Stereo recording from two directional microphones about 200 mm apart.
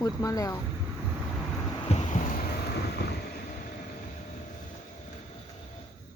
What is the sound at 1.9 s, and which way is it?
Boat, 35° left (ahead or behind).